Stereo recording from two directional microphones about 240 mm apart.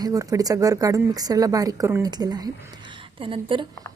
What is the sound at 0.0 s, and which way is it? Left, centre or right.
A woman's voice, centre.